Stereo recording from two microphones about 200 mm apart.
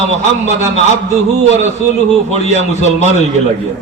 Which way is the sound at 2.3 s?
35° right (ahead or behind).